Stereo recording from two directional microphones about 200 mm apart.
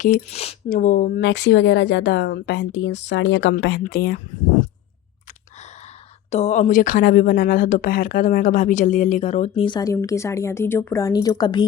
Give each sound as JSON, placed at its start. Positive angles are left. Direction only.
{"t": 0.0, "sound": "a woman's voice", "side_deg": 35}
{"t": 0.7, "sound": "speech", "side_deg": 45}
{"t": 6.3, "sound": "a woman's voice", "side_deg": 35}